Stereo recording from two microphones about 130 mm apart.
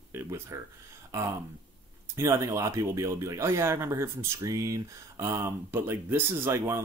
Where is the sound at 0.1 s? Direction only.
20° right (ahead or behind).